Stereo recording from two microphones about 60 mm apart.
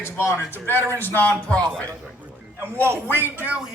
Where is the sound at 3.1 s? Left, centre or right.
Right.